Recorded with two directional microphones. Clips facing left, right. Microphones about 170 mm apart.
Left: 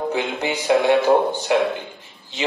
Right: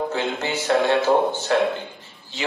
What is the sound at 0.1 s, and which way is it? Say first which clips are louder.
A man's voice: left 2 dB; 15° left (ahead or behind).